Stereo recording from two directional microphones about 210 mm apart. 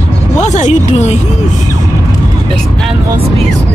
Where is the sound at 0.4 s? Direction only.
35° left (ahead or behind).